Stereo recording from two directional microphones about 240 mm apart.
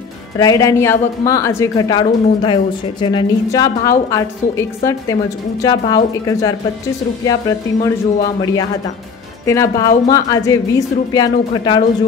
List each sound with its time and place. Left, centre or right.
0.4 s speech: centre
9.5 s speech: centre